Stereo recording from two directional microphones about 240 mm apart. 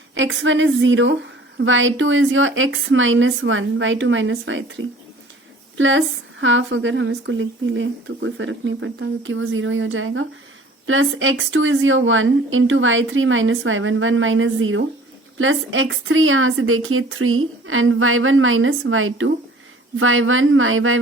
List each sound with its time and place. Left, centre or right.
0.1 s a woman's voice: right